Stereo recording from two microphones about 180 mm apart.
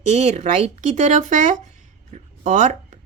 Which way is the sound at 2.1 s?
40° right (ahead or behind).